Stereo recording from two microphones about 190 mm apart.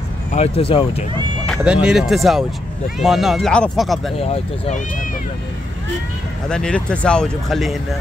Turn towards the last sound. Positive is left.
turn(degrees=0)  # may be behind; listen again after turning